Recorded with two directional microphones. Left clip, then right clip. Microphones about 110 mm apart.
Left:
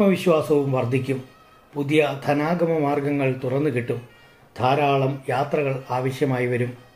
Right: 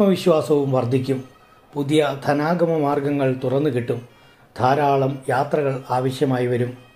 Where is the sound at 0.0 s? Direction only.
25° right (ahead or behind).